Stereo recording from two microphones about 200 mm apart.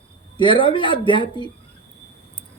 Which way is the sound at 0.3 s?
25° left (ahead or behind).